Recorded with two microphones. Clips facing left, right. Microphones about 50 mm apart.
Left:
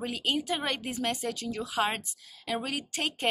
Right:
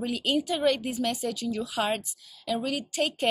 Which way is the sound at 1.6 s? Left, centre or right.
Left.